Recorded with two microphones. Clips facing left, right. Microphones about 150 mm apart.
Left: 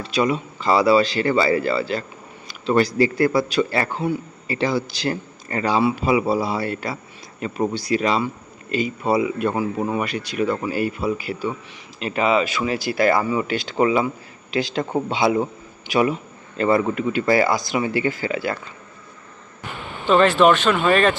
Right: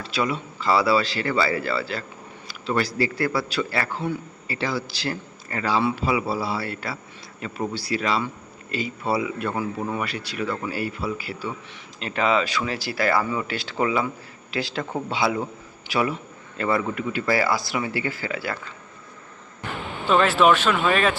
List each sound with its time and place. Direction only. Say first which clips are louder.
0.0 s a man's voice: left 5 dB; 20° left (ahead or behind)
20.1 s speech: left 3 dB; 5° right (ahead or behind)